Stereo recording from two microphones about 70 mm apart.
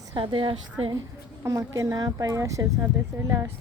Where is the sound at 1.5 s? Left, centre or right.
Right.